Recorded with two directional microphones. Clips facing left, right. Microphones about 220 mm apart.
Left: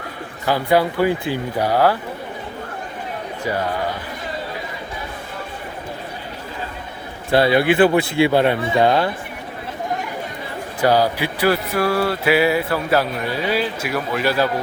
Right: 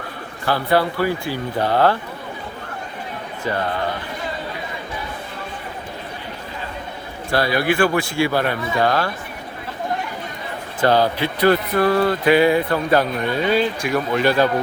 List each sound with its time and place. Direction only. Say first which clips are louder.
0.4 s speech: left 1 dB; 15° left (ahead or behind)
3.4 s speech: even; 10° left (ahead or behind)
7.3 s a man's voice: left 4 dB; 25° left (ahead or behind)
10.8 s speech: even; 10° left (ahead or behind)